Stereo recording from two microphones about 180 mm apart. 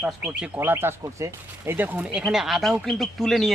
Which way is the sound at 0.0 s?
5° right (ahead or behind).